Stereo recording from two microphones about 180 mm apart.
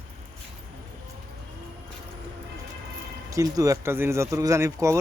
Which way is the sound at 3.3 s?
20° right (ahead or behind).